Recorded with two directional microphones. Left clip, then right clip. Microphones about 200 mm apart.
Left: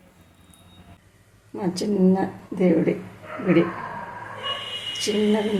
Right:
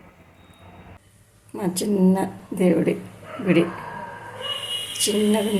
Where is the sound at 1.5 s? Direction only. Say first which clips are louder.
Right 1 dB; 10° right (ahead or behind).